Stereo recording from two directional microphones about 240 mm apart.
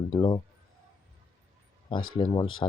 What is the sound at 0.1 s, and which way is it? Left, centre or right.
Speech, centre.